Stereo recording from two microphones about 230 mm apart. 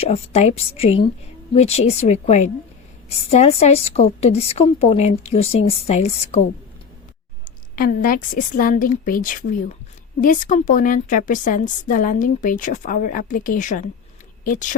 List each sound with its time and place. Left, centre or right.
0.0 s a woman's voice: left
7.8 s a woman's voice: left